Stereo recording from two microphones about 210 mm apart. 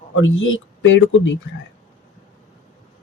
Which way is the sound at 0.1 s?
70° left (ahead or behind).